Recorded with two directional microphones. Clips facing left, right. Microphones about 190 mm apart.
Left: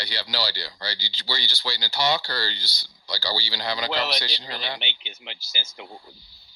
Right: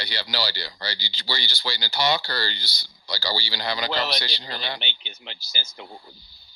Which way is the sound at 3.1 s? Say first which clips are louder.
Right 1 dB; 10° left (ahead or behind).